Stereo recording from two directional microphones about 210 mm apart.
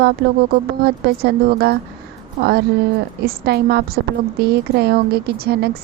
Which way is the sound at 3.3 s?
50° right (ahead or behind).